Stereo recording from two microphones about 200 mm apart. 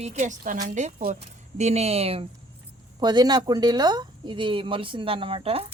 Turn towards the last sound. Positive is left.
turn(degrees=-30)  # may be behind; listen again after turning